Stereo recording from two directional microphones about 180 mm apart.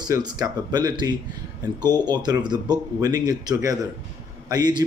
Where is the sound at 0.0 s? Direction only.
20° right (ahead or behind).